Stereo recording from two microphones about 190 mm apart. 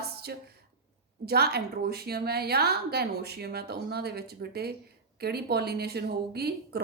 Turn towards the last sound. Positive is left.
turn(degrees=-55)  # may be behind; listen again after turning